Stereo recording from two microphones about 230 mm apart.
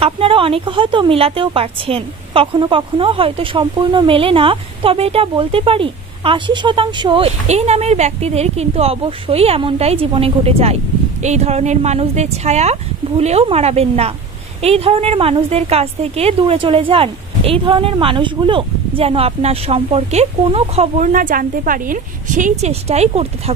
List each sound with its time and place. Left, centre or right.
0.0 s a woman's voice: right